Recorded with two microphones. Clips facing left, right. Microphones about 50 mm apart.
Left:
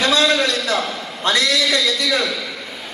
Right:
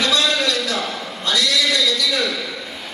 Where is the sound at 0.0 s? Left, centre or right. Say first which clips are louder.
Left 3 dB; left.